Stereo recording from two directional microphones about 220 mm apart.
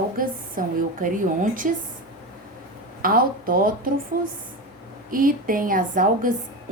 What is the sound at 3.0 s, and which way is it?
A woman's voice, 40° right (ahead or behind).